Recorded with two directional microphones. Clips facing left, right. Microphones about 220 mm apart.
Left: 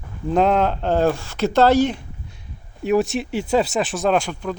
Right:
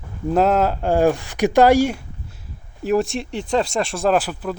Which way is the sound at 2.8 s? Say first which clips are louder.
Left 1 dB; centre (ahead or behind).